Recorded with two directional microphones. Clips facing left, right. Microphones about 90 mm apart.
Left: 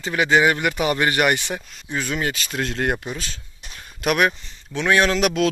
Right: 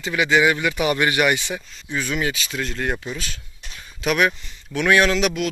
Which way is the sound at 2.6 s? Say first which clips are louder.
Left 3 dB; 65° left (ahead or behind).